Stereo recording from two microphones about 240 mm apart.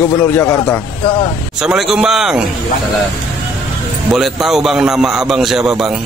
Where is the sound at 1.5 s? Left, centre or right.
Centre.